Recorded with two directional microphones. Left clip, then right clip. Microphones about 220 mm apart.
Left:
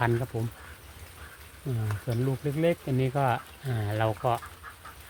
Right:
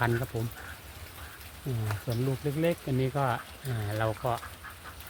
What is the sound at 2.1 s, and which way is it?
Speech, 35° left (ahead or behind).